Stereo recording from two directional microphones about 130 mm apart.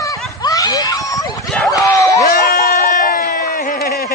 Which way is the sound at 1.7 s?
25° left (ahead or behind).